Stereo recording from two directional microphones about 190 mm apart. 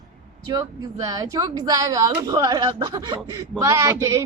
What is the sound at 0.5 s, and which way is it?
A man's voice, 20° right (ahead or behind).